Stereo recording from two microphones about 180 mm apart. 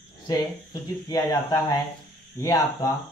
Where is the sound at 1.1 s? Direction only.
20° left (ahead or behind).